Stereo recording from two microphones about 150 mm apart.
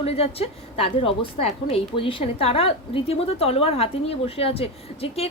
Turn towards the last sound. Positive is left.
turn(degrees=40)  # may be behind; listen again after turning